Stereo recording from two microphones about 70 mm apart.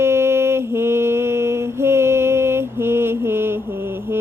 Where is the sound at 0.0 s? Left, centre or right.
Right.